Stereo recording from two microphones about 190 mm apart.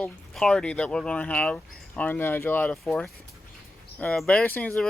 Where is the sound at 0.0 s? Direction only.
5° left (ahead or behind).